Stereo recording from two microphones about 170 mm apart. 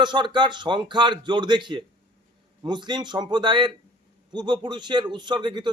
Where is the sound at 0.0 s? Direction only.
25° right (ahead or behind).